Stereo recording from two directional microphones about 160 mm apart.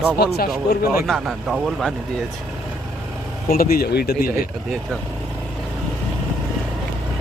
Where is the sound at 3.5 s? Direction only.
65° left (ahead or behind); by 4.3 s 85° left.